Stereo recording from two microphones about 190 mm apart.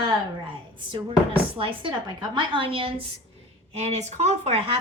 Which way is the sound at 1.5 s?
30° right (ahead or behind).